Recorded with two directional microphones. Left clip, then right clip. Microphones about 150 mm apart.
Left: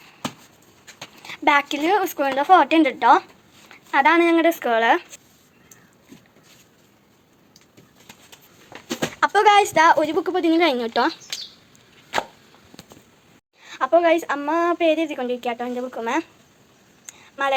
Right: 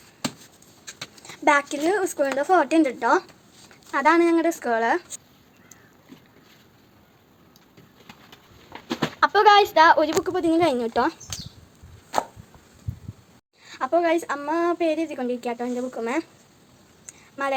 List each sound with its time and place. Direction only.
1.3 s a woman's voice: 5° left (ahead or behind)
4.4 s speech: 10° left (ahead or behind)
9.2 s a woman's voice: 10° left (ahead or behind); by 11.3 s 5° right (ahead or behind)
13.7 s a woman's voice: centre (ahead or behind)
17.1 s a sound: 5° right (ahead or behind)